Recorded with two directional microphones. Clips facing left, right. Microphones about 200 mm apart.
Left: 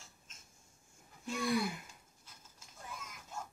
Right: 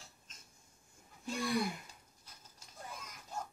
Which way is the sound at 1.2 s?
Centre (ahead or behind).